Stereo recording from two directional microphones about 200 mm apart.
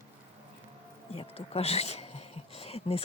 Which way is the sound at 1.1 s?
30° left (ahead or behind).